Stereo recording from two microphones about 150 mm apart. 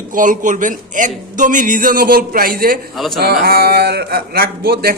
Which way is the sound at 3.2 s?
90° right.